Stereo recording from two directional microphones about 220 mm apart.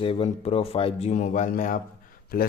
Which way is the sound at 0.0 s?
25° left (ahead or behind).